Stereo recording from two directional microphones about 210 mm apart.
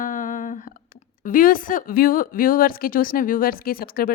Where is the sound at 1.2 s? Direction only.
40° left (ahead or behind).